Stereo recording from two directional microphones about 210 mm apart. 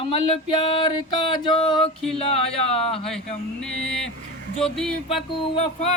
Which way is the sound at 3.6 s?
5° left (ahead or behind).